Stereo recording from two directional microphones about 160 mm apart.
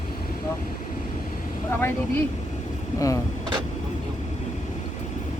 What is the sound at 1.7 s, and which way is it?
Speech, 15° left (ahead or behind).